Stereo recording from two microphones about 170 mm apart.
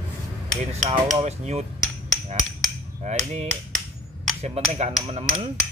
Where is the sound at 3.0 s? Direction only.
40° right (ahead or behind).